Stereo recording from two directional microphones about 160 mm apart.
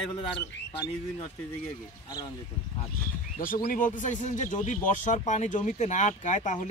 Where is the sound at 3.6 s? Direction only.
55° left (ahead or behind).